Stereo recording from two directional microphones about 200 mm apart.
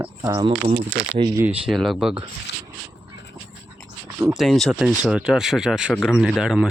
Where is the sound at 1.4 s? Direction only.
5° right (ahead or behind).